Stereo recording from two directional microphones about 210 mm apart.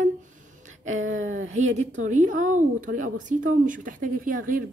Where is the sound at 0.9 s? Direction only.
70° right (ahead or behind).